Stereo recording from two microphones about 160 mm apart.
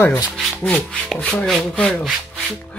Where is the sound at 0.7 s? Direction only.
5° left (ahead or behind).